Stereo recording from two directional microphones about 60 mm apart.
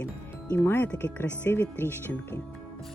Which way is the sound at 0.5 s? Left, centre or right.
Left.